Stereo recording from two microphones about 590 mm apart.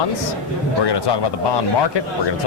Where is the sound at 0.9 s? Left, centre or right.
Left.